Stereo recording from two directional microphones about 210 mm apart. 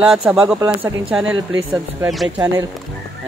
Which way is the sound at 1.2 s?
70° right (ahead or behind).